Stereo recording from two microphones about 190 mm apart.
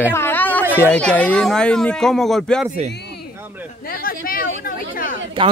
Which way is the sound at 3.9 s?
50° left (ahead or behind).